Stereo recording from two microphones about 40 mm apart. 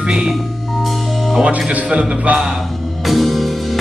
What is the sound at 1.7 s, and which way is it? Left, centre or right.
Speech, right.